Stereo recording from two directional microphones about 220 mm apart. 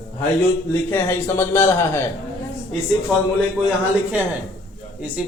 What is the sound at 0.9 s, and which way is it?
Speech, 10° left (ahead or behind).